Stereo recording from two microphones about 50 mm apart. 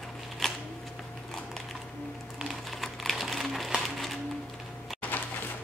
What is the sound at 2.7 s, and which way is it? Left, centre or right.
Computer keyboard, centre.